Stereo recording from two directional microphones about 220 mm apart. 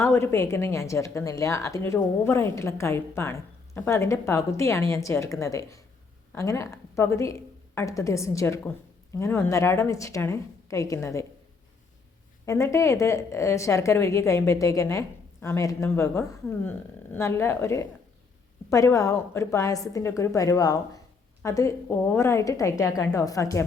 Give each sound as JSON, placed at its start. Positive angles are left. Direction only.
{"t": 0.0, "sound": "a woman's voice", "side_deg": 10}
{"t": 12.5, "sound": "a woman's voice", "side_deg": 15}